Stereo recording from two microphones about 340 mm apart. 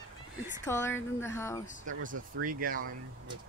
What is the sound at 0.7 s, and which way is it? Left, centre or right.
Speech, centre.